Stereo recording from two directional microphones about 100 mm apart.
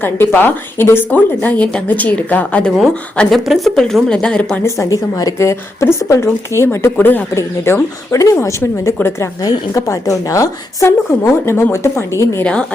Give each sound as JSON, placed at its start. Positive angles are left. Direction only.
{"t": 0.0, "sound": "speech", "side_deg": 20}
{"t": 4.6, "sound": "a woman's voice", "side_deg": 30}
{"t": 9.4, "sound": "a woman's voice", "side_deg": 35}
{"t": 12.4, "sound": "speech", "side_deg": 10}